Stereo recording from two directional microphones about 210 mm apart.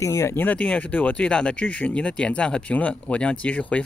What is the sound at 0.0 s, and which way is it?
Speech, 15° left (ahead or behind).